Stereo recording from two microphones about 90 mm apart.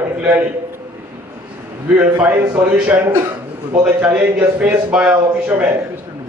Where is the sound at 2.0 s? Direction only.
15° right (ahead or behind).